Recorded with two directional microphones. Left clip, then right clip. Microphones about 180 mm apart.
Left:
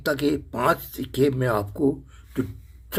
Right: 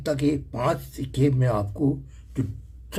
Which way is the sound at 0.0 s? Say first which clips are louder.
Left 1 dB; 20° left (ahead or behind).